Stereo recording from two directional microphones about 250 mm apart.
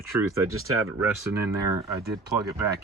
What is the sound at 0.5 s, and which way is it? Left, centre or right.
Speech, right.